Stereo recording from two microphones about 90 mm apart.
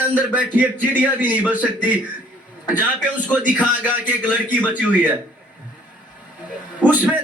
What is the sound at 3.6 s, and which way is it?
Speech, 15° right (ahead or behind).